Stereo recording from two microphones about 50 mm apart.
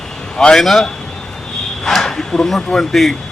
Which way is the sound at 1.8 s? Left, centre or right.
Centre.